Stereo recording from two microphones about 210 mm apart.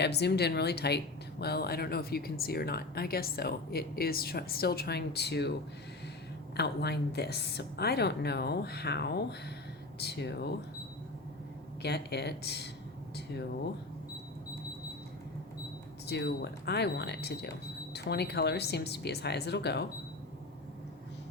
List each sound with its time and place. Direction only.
0.0 s speech: 50° left (ahead or behind)
6.6 s speech: 50° left (ahead or behind)
11.8 s speech: 50° left (ahead or behind)
16.0 s speech: 50° left (ahead or behind)